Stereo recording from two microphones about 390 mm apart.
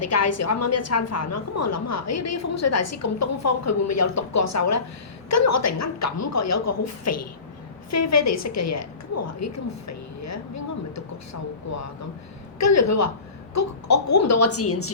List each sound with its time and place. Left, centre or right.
0.0 s a woman's voice: left